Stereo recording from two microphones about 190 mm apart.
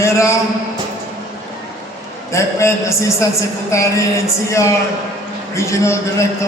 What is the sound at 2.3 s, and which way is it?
A man's voice, 15° left (ahead or behind).